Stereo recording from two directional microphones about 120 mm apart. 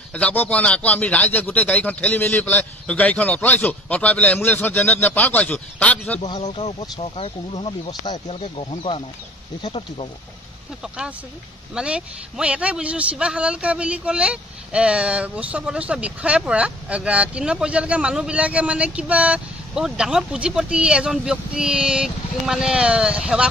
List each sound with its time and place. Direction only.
0.1 s a man's voice: 15° left (ahead or behind)
6.5 s speech: 50° left (ahead or behind)
10.8 s speech: 5° right (ahead or behind)